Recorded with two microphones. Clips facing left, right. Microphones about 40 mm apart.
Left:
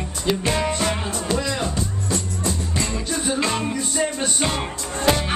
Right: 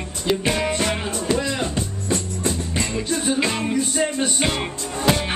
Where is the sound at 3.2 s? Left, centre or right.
Centre.